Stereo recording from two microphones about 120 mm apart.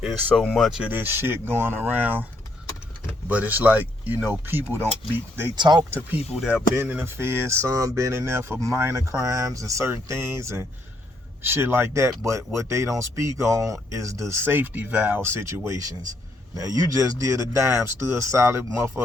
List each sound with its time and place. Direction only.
0.0 s speech: centre (ahead or behind); by 2.2 s 15° right (ahead or behind)
3.2 s speech: 15° right (ahead or behind)
5.5 s speech: 40° right (ahead or behind)
6.5 s speech: 15° right (ahead or behind)